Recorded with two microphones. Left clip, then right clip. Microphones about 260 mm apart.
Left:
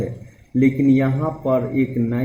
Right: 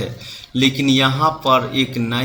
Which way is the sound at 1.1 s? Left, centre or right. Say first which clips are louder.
Right 6 dB; right.